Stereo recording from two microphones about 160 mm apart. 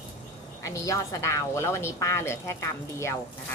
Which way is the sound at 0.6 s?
20° left (ahead or behind).